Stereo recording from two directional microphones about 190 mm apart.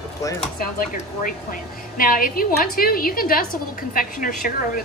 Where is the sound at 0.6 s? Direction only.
45° left (ahead or behind).